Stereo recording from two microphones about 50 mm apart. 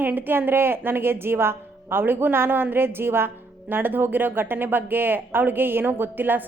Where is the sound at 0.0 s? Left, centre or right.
Right.